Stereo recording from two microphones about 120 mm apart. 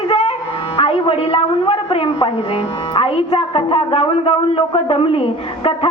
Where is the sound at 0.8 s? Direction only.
55° left (ahead or behind).